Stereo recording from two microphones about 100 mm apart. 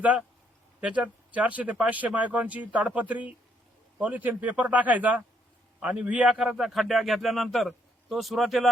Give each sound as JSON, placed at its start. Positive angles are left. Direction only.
{"t": 0.8, "sound": "a man's voice", "side_deg": -15}